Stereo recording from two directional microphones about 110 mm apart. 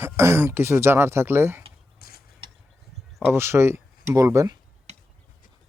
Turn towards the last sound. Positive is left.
turn(degrees=-35)  # may be behind; listen again after turning